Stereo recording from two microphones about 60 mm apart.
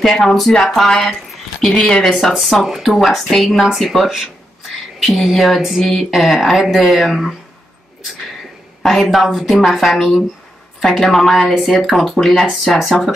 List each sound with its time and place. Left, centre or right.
0.0 s speech: centre
1.8 s speech: centre
2.1 s speech: centre
8.8 s speech: centre